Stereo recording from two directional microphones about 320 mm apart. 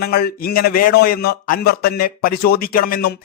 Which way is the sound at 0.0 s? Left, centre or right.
Left.